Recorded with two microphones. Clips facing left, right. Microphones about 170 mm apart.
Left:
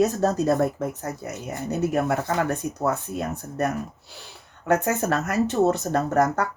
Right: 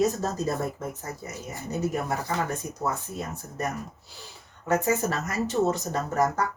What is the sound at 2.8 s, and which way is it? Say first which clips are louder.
Speech: left 5 dB; 65° left (ahead or behind).